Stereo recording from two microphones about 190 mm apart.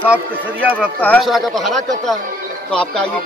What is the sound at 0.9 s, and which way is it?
A man's voice, 10° left (ahead or behind).